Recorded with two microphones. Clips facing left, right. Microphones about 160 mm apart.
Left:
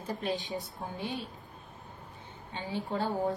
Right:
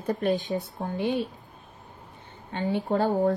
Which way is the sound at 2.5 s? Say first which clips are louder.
Right 9 dB; 60° right (ahead or behind).